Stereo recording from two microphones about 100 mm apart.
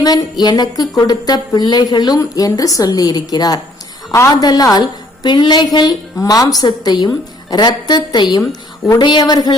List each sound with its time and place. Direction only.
0.0 s a woman's voice: 40° left (ahead or behind)